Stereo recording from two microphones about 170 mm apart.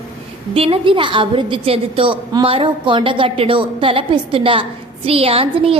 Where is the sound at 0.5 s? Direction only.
35° right (ahead or behind).